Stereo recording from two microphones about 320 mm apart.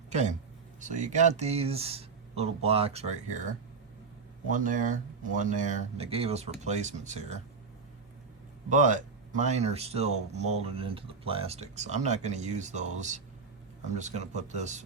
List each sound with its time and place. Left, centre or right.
0.8 s speech: right
8.7 s speech: right